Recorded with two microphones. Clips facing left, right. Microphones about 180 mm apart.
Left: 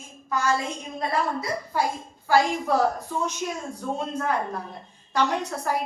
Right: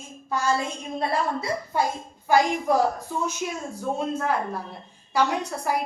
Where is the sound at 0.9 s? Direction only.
25° right (ahead or behind).